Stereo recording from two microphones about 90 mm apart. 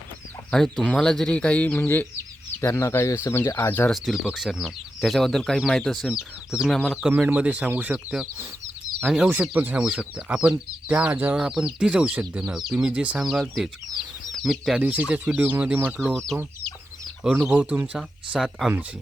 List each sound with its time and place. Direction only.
0.5 s speech: 10° left (ahead or behind)
3.9 s speech: centre (ahead or behind)
6.7 s speech: 10° left (ahead or behind)
7.2 s speech: 15° right (ahead or behind)
9.4 s speech: 20° right (ahead or behind)
9.8 s speech: 5° right (ahead or behind)
11.3 s speech: 5° right (ahead or behind)
14.8 s speech: 15° right (ahead or behind)
16.0 s speech: 10° left (ahead or behind)
17.5 s speech: 15° right (ahead or behind)
18.3 s speech: centre (ahead or behind)